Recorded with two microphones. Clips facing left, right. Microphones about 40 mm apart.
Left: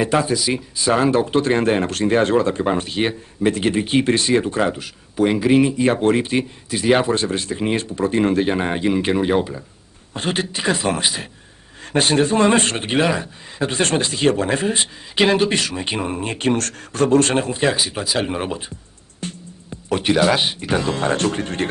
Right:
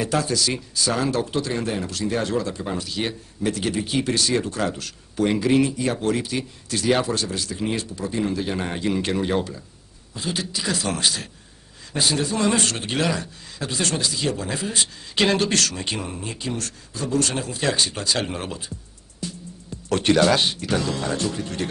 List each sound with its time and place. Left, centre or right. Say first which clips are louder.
0.0 s speech: left 4 dB; left
8.5 s speech: left 5 dB; left
10.1 s speech: left 5 dB; left
11.8 s speech: left 7 dB; left
15.1 s speech: left 4 dB; centre
16.1 s speech: left 8 dB; left
16.3 s speech: left 10 dB; left
17.7 s speech: left 2 dB; centre
19.2 s music: left 2 dB; left
19.9 s speech: left 1 dB; centre; by 21.6 s left